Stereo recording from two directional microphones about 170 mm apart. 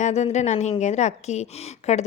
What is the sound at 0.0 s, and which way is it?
A woman's voice, 40° left (ahead or behind).